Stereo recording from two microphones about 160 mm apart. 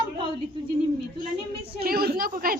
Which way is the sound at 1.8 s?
75° right (ahead or behind).